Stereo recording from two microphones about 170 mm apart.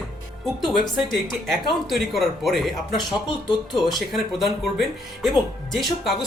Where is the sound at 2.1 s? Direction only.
Centre (ahead or behind).